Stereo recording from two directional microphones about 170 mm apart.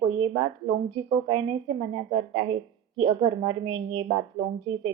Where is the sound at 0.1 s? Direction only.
30° right (ahead or behind).